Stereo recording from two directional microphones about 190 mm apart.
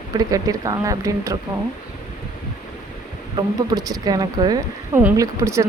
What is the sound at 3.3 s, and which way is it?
A woman's voice, 20° right (ahead or behind).